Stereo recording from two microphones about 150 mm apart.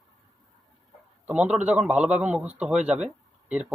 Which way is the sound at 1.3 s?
10° right (ahead or behind).